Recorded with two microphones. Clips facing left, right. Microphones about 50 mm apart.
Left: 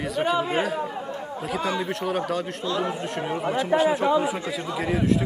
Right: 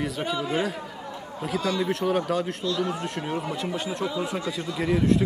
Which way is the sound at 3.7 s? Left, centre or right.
Left.